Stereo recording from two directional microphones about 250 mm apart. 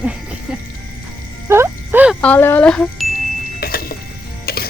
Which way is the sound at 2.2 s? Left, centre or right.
Centre.